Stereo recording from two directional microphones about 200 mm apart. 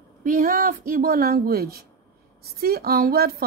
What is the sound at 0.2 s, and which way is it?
A woman's voice, 45° right (ahead or behind).